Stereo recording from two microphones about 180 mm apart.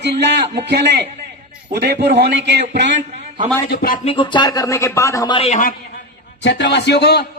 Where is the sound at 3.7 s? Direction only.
55° left (ahead or behind).